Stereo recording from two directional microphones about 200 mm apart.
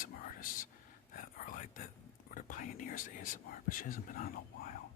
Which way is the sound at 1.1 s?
40° left (ahead or behind).